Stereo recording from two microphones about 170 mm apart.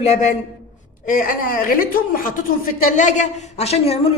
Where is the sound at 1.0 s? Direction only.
55° left (ahead or behind).